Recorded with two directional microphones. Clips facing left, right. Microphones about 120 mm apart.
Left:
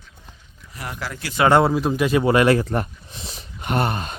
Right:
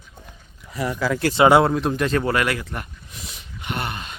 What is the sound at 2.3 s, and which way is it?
Speech, 30° left (ahead or behind).